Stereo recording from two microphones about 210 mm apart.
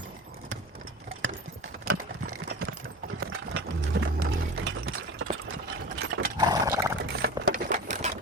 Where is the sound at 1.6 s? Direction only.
90° right.